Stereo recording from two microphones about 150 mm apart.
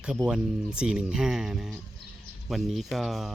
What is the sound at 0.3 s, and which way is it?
Speech, 5° right (ahead or behind).